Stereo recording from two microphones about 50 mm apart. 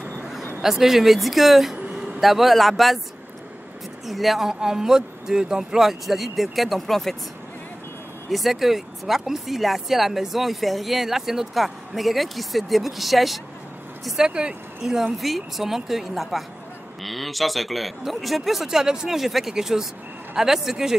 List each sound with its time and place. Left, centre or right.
0.6 s speech: centre
4.0 s speech: centre
8.3 s speech: centre
14.2 s speech: centre
15.1 s speech: centre